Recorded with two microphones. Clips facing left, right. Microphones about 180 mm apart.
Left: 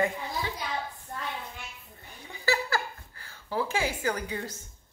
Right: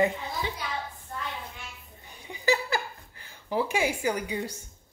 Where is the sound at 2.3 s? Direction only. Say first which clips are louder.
Right 2 dB; 20° right (ahead or behind).